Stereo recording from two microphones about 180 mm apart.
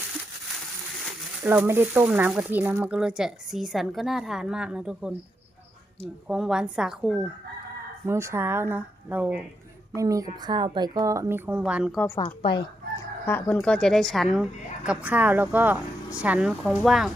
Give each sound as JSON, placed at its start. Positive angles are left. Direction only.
{"t": 1.5, "sound": "speech", "side_deg": -10}
{"t": 6.2, "sound": "speech", "side_deg": -5}
{"t": 8.0, "sound": "a woman's voice", "side_deg": -15}
{"t": 11.9, "sound": "a woman's voice", "side_deg": 15}
{"t": 12.2, "sound": "speech", "side_deg": 30}
{"t": 13.2, "sound": "speech", "side_deg": 10}